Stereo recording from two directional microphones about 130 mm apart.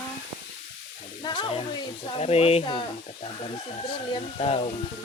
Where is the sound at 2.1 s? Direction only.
50° left (ahead or behind).